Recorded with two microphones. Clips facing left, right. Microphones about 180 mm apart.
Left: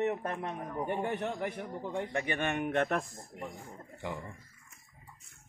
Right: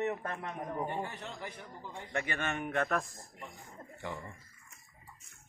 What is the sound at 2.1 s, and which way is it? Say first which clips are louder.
Speech: even; 15° left (ahead or behind).